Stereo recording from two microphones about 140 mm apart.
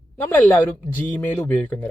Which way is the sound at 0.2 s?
15° left (ahead or behind).